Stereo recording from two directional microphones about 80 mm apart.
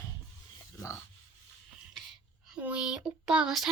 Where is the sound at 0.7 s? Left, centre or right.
Left.